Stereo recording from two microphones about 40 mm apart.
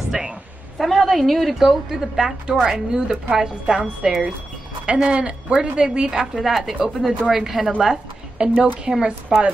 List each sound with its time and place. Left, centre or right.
0.1 s a woman's voice: centre
0.7 s a woman's voice: centre
4.8 s a woman's voice: right; by 7.7 s centre
8.4 s speech: right
8.9 s a woman's voice: centre
9.3 s speech: right